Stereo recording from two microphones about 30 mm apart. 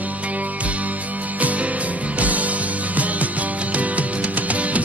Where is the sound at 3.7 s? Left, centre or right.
Right.